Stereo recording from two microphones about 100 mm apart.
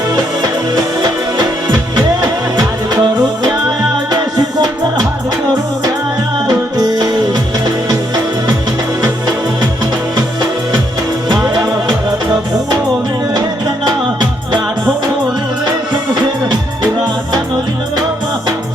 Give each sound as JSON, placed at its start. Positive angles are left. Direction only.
{"t": 0.2, "sound": "music", "side_deg": -40}
{"t": 6.5, "sound": "music", "side_deg": -40}
{"t": 10.2, "sound": "music", "side_deg": -45}
{"t": 13.8, "sound": "music", "side_deg": -45}